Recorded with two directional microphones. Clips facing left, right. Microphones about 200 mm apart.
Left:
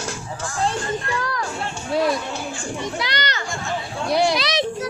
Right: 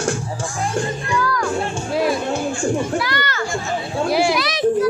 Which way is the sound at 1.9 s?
Centre (ahead or behind).